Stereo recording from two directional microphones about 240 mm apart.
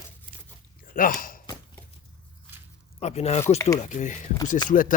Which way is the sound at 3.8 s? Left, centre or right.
Left.